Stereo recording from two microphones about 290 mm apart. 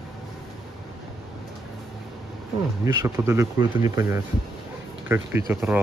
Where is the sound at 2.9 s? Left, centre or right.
Centre.